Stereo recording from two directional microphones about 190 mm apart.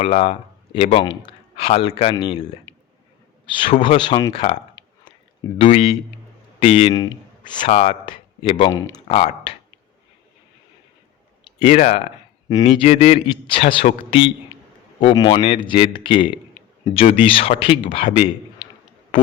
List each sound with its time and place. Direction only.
0.0 s speech: 30° left (ahead or behind)
3.7 s a man's voice: 35° left (ahead or behind)
4.8 s a sound: 15° left (ahead or behind)
5.5 s a man's voice: 30° left (ahead or behind)
9.0 s speech: 30° left (ahead or behind)
11.6 s speech: 35° left (ahead or behind)
12.5 s a man's voice: 20° left (ahead or behind)